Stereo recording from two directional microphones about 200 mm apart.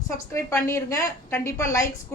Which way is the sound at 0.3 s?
15° left (ahead or behind).